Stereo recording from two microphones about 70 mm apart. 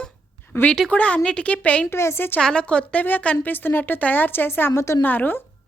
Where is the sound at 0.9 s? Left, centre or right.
Centre.